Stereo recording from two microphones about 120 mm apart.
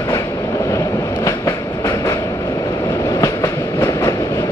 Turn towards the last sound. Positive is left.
turn(degrees=25)  # may be behind; listen again after turning